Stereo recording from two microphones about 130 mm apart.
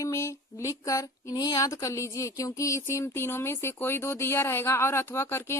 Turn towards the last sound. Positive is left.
turn(degrees=20)  # may be behind; listen again after turning